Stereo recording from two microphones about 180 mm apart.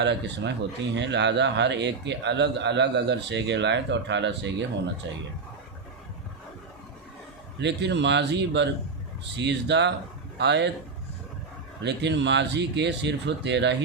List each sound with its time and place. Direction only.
0.0 s a man's voice: 75° right (ahead or behind)
7.6 s a man's voice: 75° right (ahead or behind)
11.8 s a man's voice: 75° right (ahead or behind)